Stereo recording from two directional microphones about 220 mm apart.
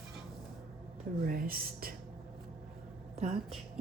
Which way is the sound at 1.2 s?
40° right (ahead or behind).